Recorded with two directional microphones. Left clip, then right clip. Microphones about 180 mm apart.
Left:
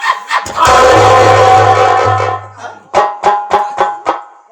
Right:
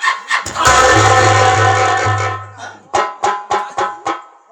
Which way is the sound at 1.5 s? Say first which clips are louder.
Left 6 dB; 15° right (ahead or behind).